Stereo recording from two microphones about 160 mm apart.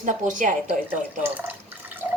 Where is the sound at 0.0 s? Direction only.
50° right (ahead or behind).